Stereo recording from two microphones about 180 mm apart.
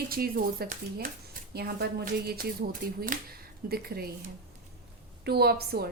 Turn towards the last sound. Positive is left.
turn(degrees=-60)  # may be behind; listen again after turning